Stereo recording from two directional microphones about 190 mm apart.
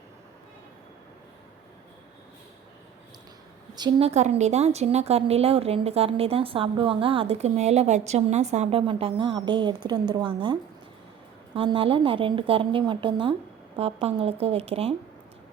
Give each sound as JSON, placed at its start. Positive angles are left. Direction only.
{"t": 3.8, "sound": "a woman's voice", "side_deg": -25}